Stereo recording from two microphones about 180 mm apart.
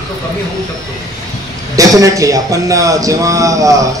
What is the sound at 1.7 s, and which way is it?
A man's voice, 20° right (ahead or behind).